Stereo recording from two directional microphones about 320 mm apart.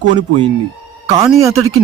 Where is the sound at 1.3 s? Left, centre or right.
Centre.